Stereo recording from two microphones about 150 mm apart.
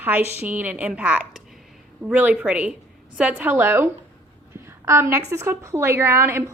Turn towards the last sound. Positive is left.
turn(degrees=-20)  # may be behind; listen again after turning